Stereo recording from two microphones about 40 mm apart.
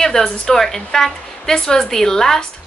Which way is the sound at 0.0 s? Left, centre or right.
Centre.